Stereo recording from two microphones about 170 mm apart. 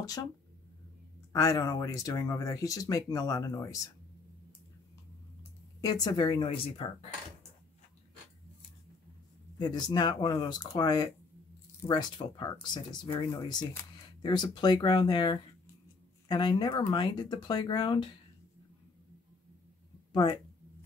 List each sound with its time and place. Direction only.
0.0 s speech: 20° left (ahead or behind)
1.3 s speech: 20° left (ahead or behind)
5.8 s speech: 25° left (ahead or behind)
9.6 s speech: 25° left (ahead or behind)
20.1 s a sound: 25° left (ahead or behind)